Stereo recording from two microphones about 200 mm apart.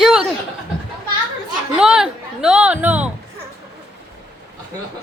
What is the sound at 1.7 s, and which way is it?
A woman's voice, 5° right (ahead or behind).